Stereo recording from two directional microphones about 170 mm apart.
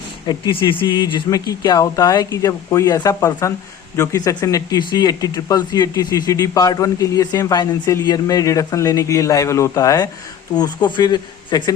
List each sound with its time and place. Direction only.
0.3 s speech: 25° left (ahead or behind)